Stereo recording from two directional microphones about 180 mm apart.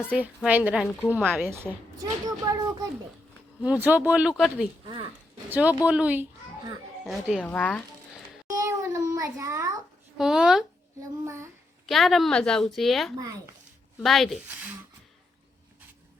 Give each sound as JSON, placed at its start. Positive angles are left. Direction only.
{"t": 0.1, "sound": "speech", "side_deg": -10}
{"t": 0.8, "sound": "speech", "side_deg": 10}
{"t": 1.1, "sound": "a child's voice", "side_deg": -10}
{"t": 3.6, "sound": "a woman's voice", "side_deg": -10}
{"t": 8.4, "sound": "a sound", "side_deg": -20}
{"t": 10.2, "sound": "a woman's voice", "side_deg": -5}
{"t": 11.9, "sound": "a woman's voice", "side_deg": 0}